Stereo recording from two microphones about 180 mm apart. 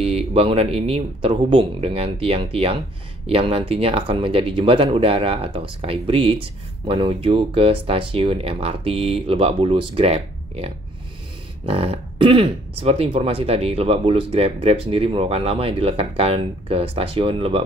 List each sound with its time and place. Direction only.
0.0 s speech: 35° right (ahead or behind)